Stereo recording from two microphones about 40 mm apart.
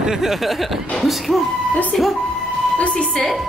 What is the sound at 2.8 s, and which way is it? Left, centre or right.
Speech, left.